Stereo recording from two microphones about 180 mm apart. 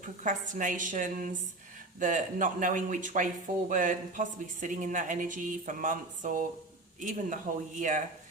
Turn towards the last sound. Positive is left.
turn(degrees=-45)  # may be behind; listen again after turning